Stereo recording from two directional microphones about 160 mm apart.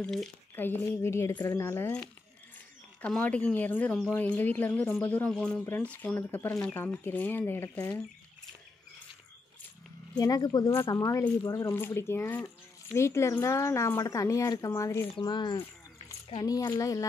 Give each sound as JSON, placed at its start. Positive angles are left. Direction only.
{"t": 0.0, "sound": "speech", "side_deg": 0}
{"t": 0.6, "sound": "speech", "side_deg": 15}
{"t": 1.6, "sound": "speech", "side_deg": 15}
{"t": 10.1, "sound": "speech", "side_deg": 25}
{"t": 15.1, "sound": "speech", "side_deg": 30}